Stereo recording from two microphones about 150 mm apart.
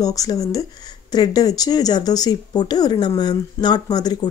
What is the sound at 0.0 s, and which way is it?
Speech, 25° left (ahead or behind).